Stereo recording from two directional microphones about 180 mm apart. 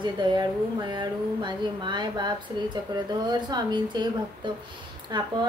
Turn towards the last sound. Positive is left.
turn(degrees=-25)  # may be behind; listen again after turning